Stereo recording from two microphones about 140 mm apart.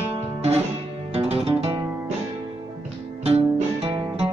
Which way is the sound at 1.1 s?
45° right (ahead or behind).